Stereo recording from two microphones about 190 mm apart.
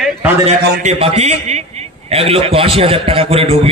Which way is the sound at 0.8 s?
35° right (ahead or behind).